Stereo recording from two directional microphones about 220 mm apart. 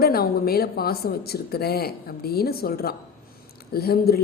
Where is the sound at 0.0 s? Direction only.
45° left (ahead or behind).